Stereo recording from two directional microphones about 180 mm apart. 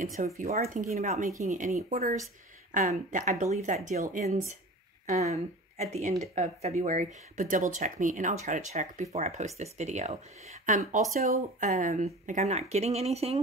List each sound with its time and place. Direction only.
0.0 s speech: 50° right (ahead or behind)